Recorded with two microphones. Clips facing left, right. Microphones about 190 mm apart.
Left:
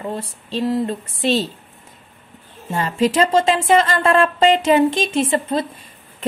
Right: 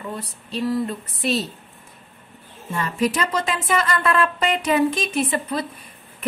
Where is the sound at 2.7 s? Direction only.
25° left (ahead or behind).